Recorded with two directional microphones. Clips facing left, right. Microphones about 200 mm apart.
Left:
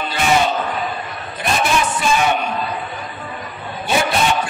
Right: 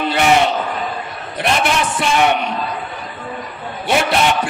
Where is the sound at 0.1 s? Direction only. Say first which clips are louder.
Right 2 dB; 70° right (ahead or behind).